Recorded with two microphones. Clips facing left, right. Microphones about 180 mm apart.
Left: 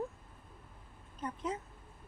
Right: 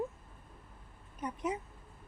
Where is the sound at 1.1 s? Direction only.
15° right (ahead or behind).